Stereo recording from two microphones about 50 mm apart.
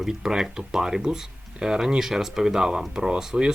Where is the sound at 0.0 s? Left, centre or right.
Centre.